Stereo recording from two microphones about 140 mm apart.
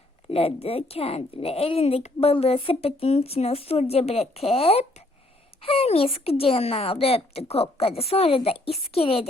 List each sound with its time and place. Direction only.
0.3 s a woman's voice: 45° left (ahead or behind)